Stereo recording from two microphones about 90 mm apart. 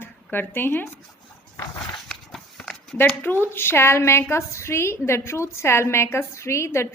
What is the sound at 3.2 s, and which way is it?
A woman's voice, 20° left (ahead or behind).